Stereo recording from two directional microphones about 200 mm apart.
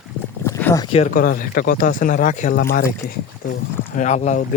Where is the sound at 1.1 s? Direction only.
45° left (ahead or behind).